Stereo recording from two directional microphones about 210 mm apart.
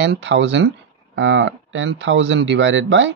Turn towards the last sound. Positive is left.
turn(degrees=-60)  # may be behind; listen again after turning